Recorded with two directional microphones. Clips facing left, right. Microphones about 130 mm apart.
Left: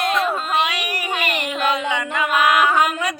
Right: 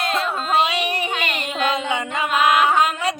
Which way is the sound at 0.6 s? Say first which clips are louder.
Right 2 dB; 25° right (ahead or behind).